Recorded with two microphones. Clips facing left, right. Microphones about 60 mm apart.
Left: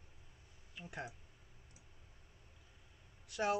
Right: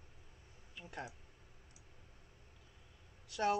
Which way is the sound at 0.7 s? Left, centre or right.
Centre.